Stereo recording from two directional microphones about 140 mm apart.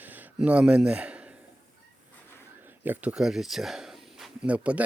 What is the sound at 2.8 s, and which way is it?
Speech, 10° right (ahead or behind).